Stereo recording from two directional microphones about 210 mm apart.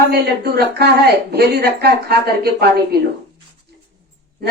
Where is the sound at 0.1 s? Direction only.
50° right (ahead or behind).